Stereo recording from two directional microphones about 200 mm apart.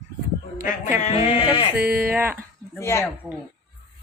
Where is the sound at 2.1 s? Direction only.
10° right (ahead or behind).